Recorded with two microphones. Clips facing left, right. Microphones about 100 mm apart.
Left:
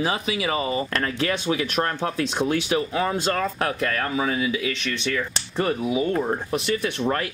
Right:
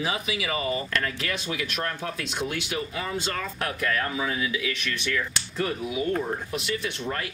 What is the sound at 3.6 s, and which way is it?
Speech, 35° left (ahead or behind).